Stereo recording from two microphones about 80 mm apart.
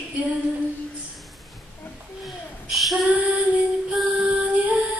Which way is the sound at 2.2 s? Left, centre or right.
Centre.